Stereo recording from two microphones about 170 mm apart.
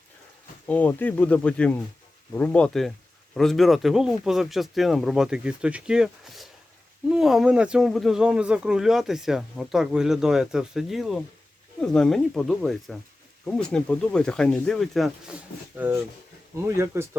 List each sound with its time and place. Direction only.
0.7 s speech: 10° left (ahead or behind)
15.7 s speech: 10° right (ahead or behind)